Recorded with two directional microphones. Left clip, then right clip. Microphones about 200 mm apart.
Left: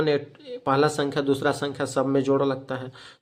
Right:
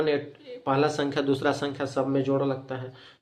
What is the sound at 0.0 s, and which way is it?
Speech, 30° left (ahead or behind).